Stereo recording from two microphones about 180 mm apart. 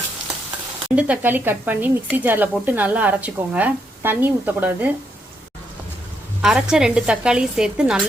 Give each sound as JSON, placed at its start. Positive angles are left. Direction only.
{"t": 0.9, "sound": "speech", "side_deg": -10}
{"t": 6.4, "sound": "a woman's voice", "side_deg": -5}